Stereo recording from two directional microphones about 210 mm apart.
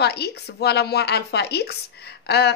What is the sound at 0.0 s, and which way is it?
Speech, 50° left (ahead or behind).